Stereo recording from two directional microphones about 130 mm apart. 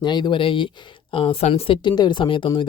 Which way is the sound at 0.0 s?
35° left (ahead or behind).